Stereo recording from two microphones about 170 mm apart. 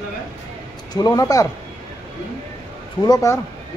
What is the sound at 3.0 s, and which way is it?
Speech, 20° left (ahead or behind).